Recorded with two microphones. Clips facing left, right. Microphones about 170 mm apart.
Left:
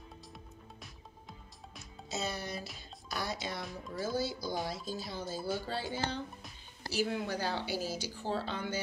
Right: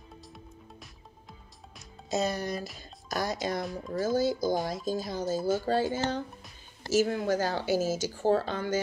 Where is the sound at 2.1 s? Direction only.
40° right (ahead or behind).